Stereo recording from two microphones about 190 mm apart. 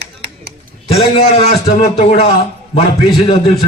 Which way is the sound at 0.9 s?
35° left (ahead or behind).